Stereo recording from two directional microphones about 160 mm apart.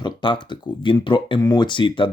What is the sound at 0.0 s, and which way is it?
Speech, 30° left (ahead or behind).